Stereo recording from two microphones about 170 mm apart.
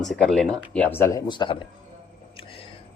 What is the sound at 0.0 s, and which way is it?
A man's voice, 5° left (ahead or behind).